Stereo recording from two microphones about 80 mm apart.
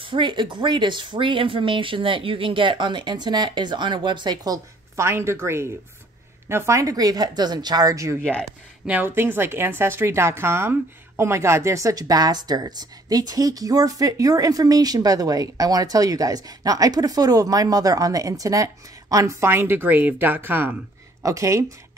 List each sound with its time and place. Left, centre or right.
0.0 s speech: right
4.9 s a woman's voice: right
8.4 s a woman's voice: centre
21.2 s a woman's voice: right